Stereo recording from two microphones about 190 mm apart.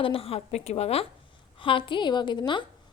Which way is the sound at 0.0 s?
30° left (ahead or behind).